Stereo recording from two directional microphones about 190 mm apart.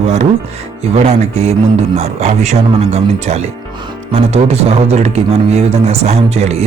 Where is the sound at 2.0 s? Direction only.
35° right (ahead or behind).